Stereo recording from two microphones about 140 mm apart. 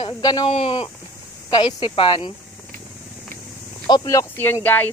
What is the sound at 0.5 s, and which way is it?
Speech, 45° left (ahead or behind).